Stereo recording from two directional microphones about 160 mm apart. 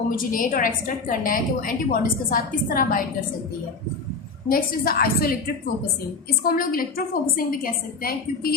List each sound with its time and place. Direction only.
0.2 s a woman's voice: 60° left (ahead or behind)
4.4 s a woman's voice: 70° left (ahead or behind)
6.4 s a woman's voice: 65° left (ahead or behind)